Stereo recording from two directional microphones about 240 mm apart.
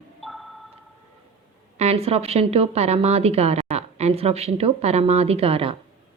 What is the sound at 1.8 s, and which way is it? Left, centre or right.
A woman's voice, right.